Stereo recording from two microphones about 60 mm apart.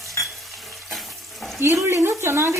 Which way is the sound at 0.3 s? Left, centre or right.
Centre.